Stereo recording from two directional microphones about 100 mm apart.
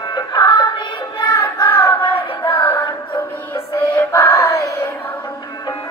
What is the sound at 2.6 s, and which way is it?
Music, 15° left (ahead or behind).